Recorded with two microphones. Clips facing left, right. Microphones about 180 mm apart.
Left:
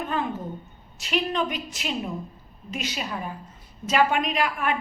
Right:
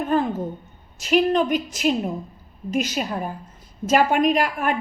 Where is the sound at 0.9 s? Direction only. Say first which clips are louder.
Right 7 dB; 45° right (ahead or behind).